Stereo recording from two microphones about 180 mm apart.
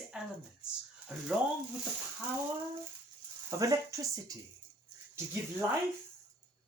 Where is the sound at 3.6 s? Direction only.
20° right (ahead or behind).